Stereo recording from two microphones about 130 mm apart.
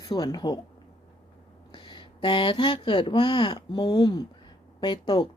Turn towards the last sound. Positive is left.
turn(degrees=35)  # may be behind; listen again after turning